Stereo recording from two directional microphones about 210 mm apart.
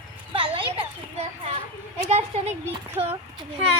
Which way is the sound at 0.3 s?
25° right (ahead or behind).